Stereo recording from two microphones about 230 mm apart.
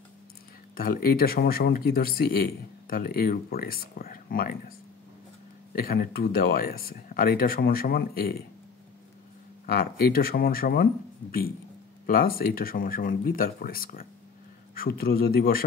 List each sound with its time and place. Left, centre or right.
0.7 s speech: left
5.7 s speech: left
9.7 s speech: left
12.1 s speech: left